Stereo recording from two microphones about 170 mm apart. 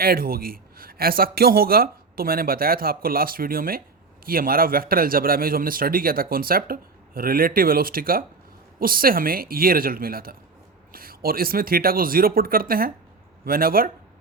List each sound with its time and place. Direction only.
0.0 s a man's voice: 60° right (ahead or behind)